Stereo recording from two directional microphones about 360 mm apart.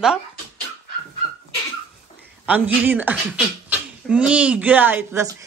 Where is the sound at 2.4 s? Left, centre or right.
Centre.